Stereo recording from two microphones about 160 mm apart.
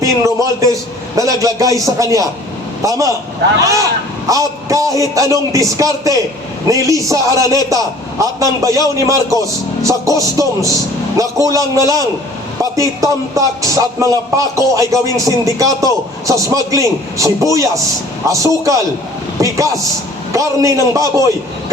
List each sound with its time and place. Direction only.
0.0 s speech: 20° right (ahead or behind)
9.8 s a man's voice: 20° right (ahead or behind)